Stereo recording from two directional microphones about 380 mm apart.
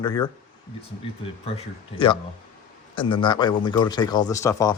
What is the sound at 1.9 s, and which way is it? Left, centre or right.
Speech, centre.